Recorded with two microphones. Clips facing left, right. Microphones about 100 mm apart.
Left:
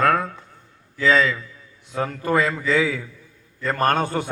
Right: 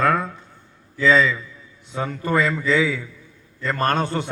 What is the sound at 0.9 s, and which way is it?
A man's voice, centre (ahead or behind).